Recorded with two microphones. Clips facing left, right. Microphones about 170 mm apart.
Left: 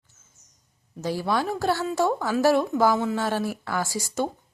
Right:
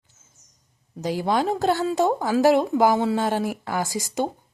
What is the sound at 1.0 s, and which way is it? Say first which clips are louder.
A woman's voice: right 3 dB; 20° right (ahead or behind).